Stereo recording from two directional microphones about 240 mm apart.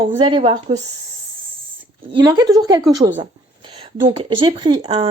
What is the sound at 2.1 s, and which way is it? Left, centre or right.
A woman's voice, centre.